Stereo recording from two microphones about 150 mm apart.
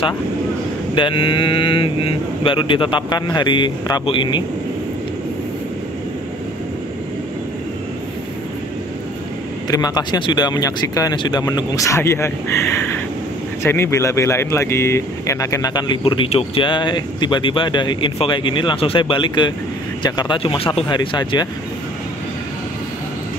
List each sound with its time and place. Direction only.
0.9 s speech: 35° left (ahead or behind)
9.7 s speech: 25° left (ahead or behind)